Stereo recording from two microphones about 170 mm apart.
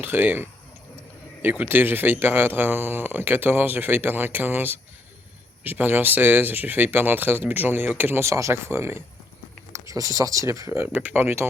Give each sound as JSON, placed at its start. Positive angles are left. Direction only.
{"t": 0.0, "sound": "speech", "side_deg": -10}